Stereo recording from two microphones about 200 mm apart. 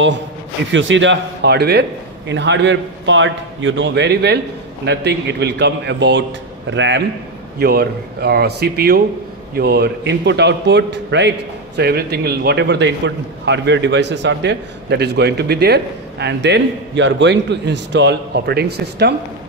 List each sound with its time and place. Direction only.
0.7 s a man's voice: 65° right (ahead or behind)
7.5 s a man's voice: 50° right (ahead or behind)